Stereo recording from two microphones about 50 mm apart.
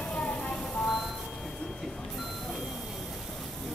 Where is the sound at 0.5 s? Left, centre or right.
Centre.